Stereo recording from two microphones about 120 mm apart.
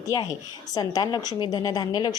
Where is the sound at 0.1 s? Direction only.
30° left (ahead or behind).